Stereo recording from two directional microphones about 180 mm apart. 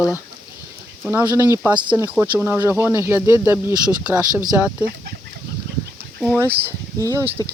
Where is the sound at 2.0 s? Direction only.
10° right (ahead or behind).